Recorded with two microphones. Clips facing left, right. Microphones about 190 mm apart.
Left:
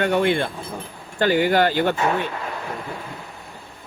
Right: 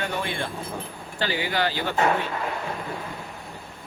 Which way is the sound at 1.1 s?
50° left (ahead or behind).